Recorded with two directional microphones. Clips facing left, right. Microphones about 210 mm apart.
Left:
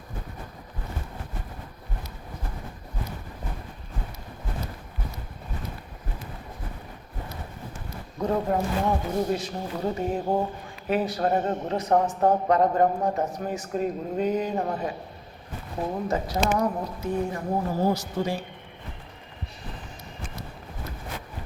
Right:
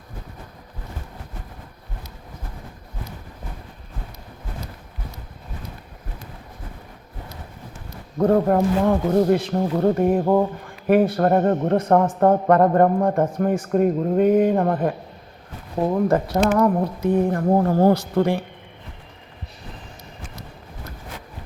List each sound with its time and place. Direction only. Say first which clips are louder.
8.2 s speech: right 8 dB; 55° right (ahead or behind)